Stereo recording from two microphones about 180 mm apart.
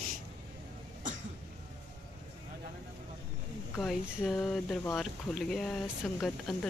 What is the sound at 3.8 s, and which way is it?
Speech, centre (ahead or behind).